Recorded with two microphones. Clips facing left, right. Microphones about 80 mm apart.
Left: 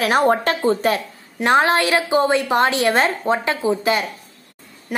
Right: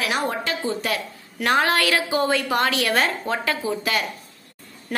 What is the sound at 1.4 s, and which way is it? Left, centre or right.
A woman's voice, left.